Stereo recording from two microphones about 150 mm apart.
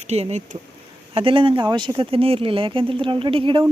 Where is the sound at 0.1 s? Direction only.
45° right (ahead or behind).